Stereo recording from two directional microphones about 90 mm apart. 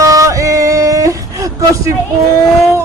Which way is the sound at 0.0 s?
40° right (ahead or behind).